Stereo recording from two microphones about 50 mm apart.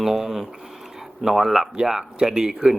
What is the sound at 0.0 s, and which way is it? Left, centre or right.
Speech, centre.